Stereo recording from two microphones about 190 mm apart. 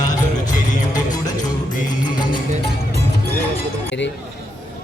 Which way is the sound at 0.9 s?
20° left (ahead or behind).